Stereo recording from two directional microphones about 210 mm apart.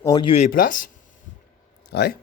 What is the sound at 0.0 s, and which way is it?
Speech, 20° left (ahead or behind).